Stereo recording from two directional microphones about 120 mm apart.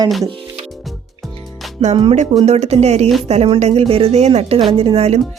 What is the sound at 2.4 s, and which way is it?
Speech, 65° right (ahead or behind).